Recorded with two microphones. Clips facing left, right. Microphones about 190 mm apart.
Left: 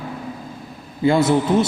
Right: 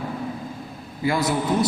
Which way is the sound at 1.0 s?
25° left (ahead or behind).